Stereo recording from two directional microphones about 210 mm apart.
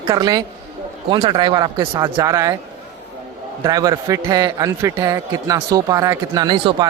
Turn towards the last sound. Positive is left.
turn(degrees=-20)  # may be behind; listen again after turning